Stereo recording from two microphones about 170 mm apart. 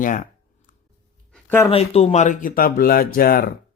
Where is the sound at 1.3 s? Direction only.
15° left (ahead or behind).